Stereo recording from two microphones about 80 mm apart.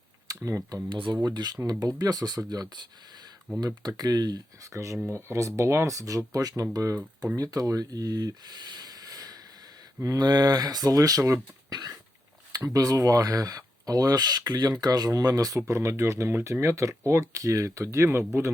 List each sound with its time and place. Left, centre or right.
0.3 s a sound: right
0.9 s speech: right
1.2 s speech: right
4.7 s speech: right
15.6 s speech: right